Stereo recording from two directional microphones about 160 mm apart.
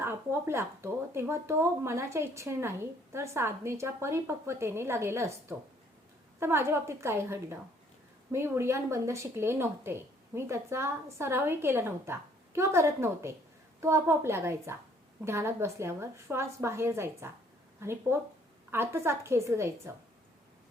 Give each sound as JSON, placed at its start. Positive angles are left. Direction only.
{"t": 0.0, "sound": "a woman's voice", "side_deg": -15}